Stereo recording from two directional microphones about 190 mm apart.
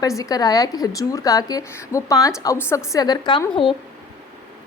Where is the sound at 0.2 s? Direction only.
20° left (ahead or behind).